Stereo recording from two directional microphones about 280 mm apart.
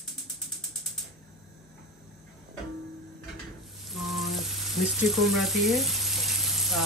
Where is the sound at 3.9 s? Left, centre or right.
Centre.